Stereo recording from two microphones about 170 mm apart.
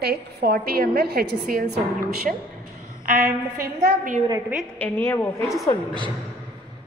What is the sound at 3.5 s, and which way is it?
Speech, 55° right (ahead or behind).